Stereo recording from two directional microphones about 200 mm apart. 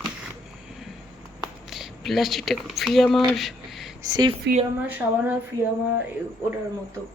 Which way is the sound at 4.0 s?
20° right (ahead or behind).